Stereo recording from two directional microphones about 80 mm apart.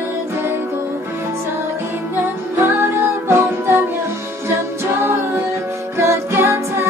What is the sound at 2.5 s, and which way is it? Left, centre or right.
Music, right.